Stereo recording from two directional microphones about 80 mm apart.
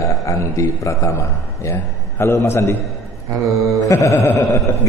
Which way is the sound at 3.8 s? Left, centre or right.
Left.